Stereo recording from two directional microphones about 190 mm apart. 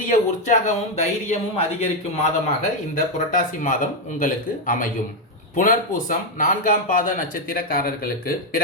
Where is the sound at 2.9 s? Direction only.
45° left (ahead or behind).